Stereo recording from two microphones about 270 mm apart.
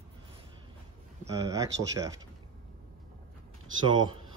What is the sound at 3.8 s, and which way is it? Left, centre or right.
Speech, centre.